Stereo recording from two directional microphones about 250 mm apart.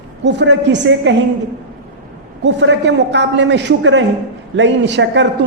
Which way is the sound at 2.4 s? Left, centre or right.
Right.